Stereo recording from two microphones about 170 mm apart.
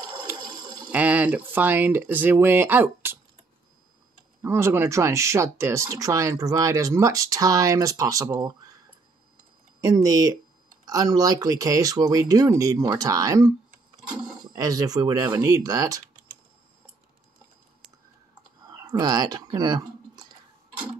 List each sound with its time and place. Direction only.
0.6 s water: 25° right (ahead or behind)
0.9 s speech: 10° right (ahead or behind)
4.4 s speech: 15° right (ahead or behind)
9.8 s speech: 20° right (ahead or behind)
14.5 s speech: 20° right (ahead or behind)
18.7 s speech: 25° right (ahead or behind)